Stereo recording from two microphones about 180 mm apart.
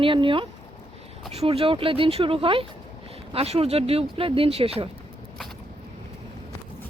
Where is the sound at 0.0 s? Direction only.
30° right (ahead or behind).